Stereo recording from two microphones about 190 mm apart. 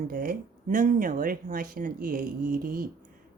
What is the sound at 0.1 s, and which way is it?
Speech, 45° right (ahead or behind).